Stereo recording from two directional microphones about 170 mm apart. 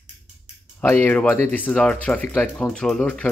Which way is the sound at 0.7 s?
10° left (ahead or behind).